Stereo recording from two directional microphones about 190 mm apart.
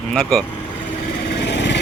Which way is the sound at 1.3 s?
65° left (ahead or behind).